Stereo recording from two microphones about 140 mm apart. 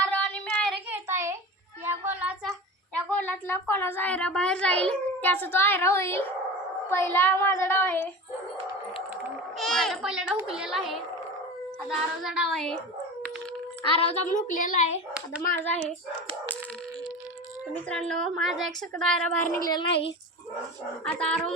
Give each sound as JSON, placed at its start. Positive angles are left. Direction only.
{"t": 0.0, "sound": "a sound", "side_deg": 10}
{"t": 0.9, "sound": "a sound", "side_deg": -20}
{"t": 3.1, "sound": "a woman's voice", "side_deg": 10}
{"t": 9.6, "sound": "a sound", "side_deg": 5}
{"t": 10.5, "sound": "a woman's voice", "side_deg": -5}
{"t": 14.0, "sound": "a child's voice", "side_deg": 45}
{"t": 14.3, "sound": "speech", "side_deg": 70}
{"t": 15.5, "sound": "a child's voice", "side_deg": 10}
{"t": 17.8, "sound": "a woman's voice", "side_deg": 5}
{"t": 21.0, "sound": "a child's voice", "side_deg": 5}